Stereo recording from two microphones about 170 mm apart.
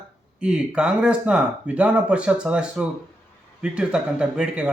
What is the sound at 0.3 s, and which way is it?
Speech, 5° right (ahead or behind).